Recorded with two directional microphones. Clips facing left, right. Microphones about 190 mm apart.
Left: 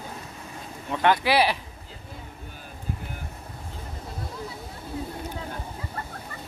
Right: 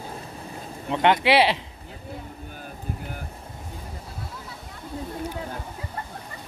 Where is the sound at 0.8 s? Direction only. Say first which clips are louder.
Right 2 dB; 20° right (ahead or behind).